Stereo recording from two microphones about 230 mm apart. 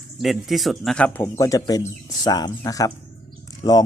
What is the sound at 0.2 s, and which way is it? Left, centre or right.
Speech, centre.